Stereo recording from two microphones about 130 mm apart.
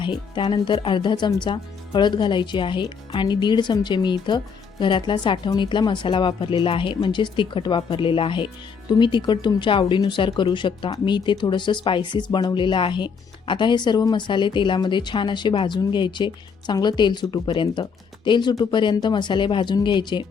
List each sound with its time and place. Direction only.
0.0 s speech: 40° left (ahead or behind)